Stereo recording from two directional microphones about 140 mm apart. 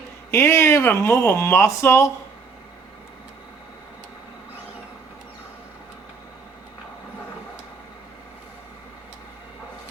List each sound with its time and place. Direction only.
0.3 s speech: 20° left (ahead or behind)